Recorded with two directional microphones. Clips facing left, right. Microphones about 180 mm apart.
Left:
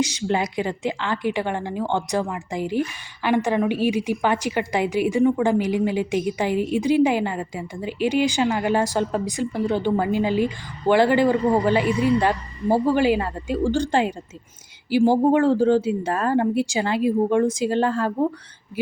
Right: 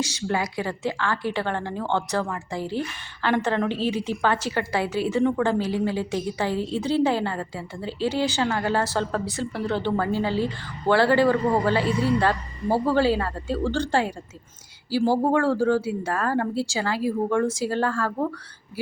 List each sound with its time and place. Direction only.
0.0 s a woman's voice: 20° left (ahead or behind)